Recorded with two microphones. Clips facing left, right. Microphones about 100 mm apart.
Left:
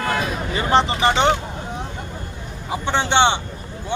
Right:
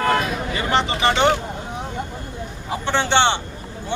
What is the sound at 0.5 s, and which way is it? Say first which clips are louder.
Speech: left 4 dB; 35° left (ahead or behind).